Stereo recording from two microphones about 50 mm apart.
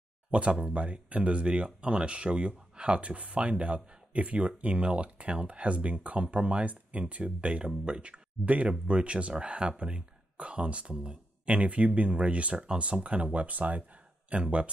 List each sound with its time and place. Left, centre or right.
0.3 s speech: right